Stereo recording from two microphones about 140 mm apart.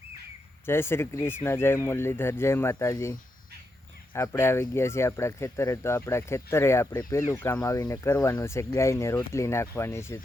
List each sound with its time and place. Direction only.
0.6 s speech: 15° left (ahead or behind)